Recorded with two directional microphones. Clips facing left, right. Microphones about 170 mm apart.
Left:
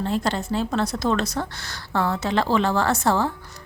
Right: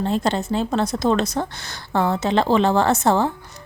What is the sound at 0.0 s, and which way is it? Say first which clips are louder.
A woman's voice: right 3 dB; 25° right (ahead or behind).